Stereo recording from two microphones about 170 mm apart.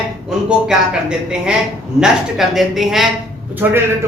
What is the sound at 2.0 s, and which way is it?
Speech, centre (ahead or behind).